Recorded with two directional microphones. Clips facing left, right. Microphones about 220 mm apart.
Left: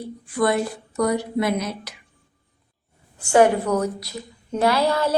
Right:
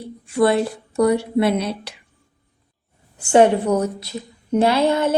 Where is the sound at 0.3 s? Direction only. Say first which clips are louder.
Right 4 dB; 25° right (ahead or behind).